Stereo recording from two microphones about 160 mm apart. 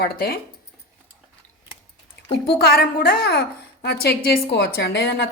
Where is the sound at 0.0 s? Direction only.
70° left (ahead or behind).